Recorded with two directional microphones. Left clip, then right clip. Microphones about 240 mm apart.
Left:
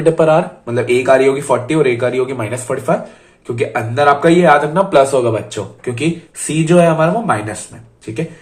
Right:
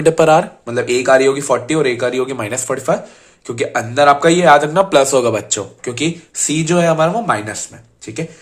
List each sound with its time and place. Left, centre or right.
0.0 s speech: right